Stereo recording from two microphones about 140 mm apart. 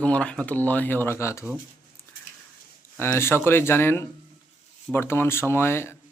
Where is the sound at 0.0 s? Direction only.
10° left (ahead or behind).